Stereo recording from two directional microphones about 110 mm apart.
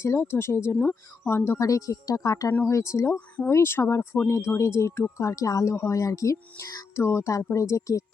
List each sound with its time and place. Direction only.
0.0 s speech: 25° left (ahead or behind)
3.2 s speech: 15° left (ahead or behind); by 8.0 s 30° left (ahead or behind)